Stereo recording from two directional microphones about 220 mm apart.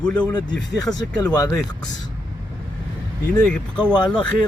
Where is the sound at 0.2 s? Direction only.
20° left (ahead or behind).